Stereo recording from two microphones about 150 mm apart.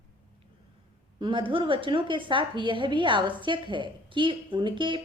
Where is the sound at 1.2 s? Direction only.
35° right (ahead or behind).